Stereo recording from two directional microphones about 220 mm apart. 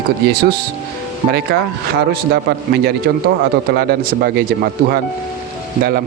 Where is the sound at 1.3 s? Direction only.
45° right (ahead or behind).